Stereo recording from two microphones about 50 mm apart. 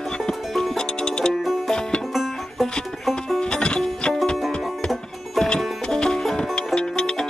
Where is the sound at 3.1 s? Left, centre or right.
Centre.